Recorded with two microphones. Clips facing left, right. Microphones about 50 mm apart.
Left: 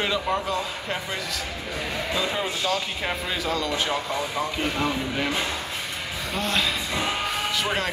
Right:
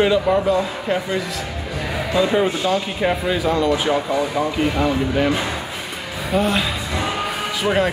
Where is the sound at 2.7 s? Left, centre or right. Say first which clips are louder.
Right 7 dB; centre.